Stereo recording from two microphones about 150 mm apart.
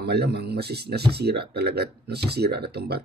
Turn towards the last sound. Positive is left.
turn(degrees=-90)